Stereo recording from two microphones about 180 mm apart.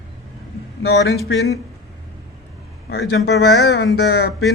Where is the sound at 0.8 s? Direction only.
65° left (ahead or behind).